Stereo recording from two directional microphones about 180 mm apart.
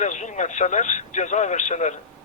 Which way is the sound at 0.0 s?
40° left (ahead or behind).